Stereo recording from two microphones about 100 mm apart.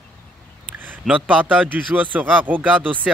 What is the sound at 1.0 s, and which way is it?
Speech, 15° right (ahead or behind).